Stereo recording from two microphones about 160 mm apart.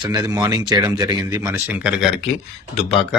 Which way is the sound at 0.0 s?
25° right (ahead or behind).